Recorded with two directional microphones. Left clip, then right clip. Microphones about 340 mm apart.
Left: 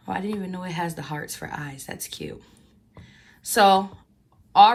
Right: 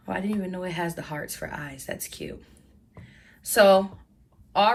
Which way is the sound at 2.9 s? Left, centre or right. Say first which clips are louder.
Left 1 dB; centre.